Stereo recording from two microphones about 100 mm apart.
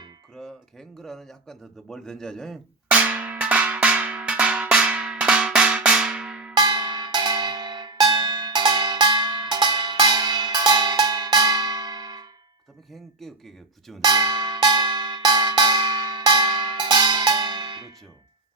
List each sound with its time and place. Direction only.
0.3 s speech: 5° left (ahead or behind)
2.9 s drum: 15° right (ahead or behind)
6.5 s cowbell: 45° right (ahead or behind)
12.9 s speech: 5° left (ahead or behind)
14.0 s cowbell: 45° right (ahead or behind)